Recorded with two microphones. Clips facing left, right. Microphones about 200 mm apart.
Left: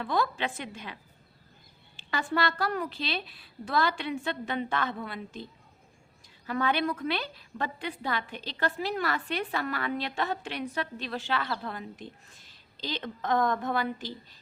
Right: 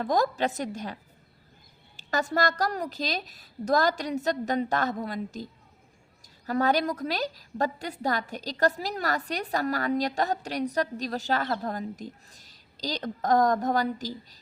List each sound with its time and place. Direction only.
0.0 s a woman's voice: 40° right (ahead or behind)
2.0 s a woman's voice: 40° right (ahead or behind)